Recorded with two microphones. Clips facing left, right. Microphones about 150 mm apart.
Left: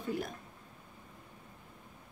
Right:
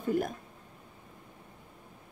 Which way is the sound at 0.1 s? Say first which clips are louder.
Right 8 dB; 50° right (ahead or behind).